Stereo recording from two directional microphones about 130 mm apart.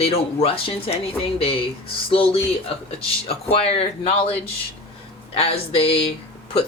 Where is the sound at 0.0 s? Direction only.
50° left (ahead or behind).